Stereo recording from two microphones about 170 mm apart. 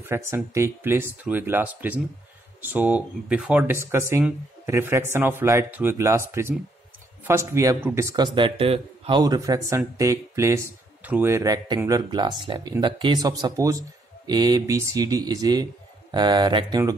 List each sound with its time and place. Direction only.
0.0 s a man's voice: 15° right (ahead or behind)
8.4 s a man's voice: 30° right (ahead or behind)
9.2 s speech: 20° right (ahead or behind)